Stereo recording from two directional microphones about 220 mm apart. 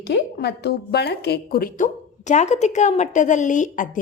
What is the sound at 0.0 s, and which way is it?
A woman's voice, 50° left (ahead or behind).